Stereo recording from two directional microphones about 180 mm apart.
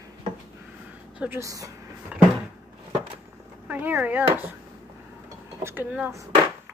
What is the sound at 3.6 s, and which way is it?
Speech, 10° right (ahead or behind).